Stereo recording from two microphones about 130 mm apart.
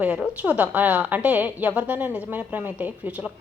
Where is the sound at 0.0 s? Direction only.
10° right (ahead or behind).